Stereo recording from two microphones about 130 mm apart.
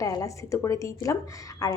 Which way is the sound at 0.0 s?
25° left (ahead or behind).